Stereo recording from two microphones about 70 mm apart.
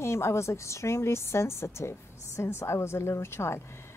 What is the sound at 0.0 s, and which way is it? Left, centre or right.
A woman's voice, left.